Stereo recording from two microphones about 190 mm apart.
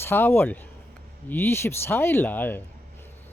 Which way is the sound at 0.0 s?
10° left (ahead or behind).